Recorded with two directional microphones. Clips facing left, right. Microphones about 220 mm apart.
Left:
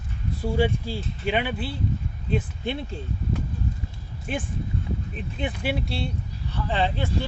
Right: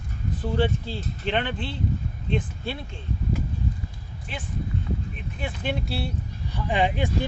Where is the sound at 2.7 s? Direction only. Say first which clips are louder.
Left 3 dB; 20° left (ahead or behind).